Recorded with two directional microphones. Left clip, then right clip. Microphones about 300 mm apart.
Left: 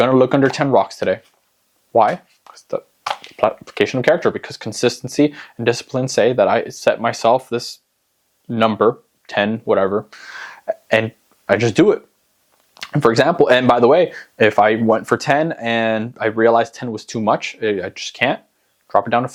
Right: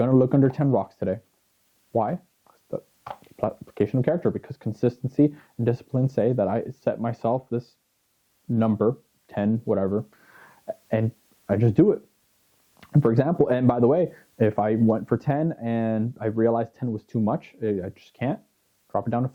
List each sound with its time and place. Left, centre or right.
0.0 s speech: centre